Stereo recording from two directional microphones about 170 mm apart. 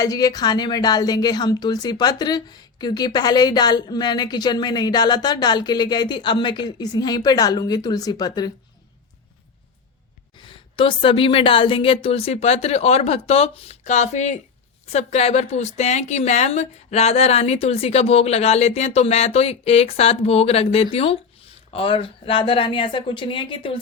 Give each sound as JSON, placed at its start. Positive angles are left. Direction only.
{"t": 0.0, "sound": "a woman's voice", "side_deg": 20}
{"t": 10.3, "sound": "a woman's voice", "side_deg": 30}